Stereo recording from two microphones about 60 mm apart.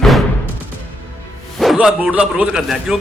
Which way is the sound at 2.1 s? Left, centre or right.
Centre.